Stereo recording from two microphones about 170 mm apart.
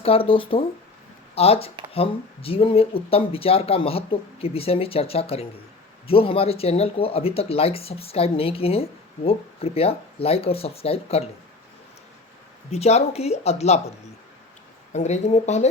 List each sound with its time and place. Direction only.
0.0 s speech: 35° left (ahead or behind)
12.7 s speech: 40° left (ahead or behind)
14.9 s speech: 40° left (ahead or behind)